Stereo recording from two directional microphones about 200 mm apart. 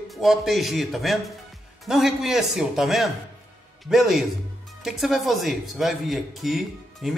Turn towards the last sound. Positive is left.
turn(degrees=0)  # may be behind; listen again after turning